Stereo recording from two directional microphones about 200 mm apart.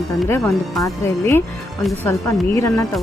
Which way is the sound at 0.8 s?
15° left (ahead or behind).